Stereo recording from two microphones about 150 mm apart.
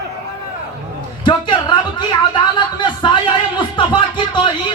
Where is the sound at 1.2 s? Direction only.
30° left (ahead or behind).